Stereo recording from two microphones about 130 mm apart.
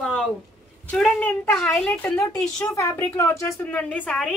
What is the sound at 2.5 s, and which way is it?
Speech, 25° left (ahead or behind).